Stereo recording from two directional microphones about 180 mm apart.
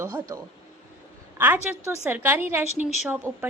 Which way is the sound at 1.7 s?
15° left (ahead or behind).